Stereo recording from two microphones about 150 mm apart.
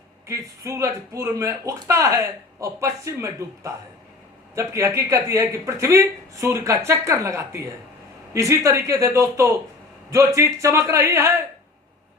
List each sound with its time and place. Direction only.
0.3 s speech: 20° right (ahead or behind)